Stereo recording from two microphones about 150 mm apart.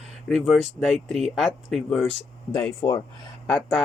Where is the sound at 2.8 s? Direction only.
50° left (ahead or behind).